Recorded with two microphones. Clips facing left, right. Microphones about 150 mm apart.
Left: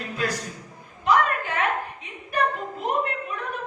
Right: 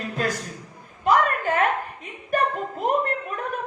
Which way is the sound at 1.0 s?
45° right (ahead or behind).